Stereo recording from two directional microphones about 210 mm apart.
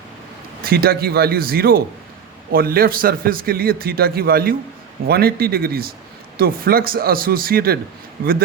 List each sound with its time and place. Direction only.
0.6 s a man's voice: 45° right (ahead or behind)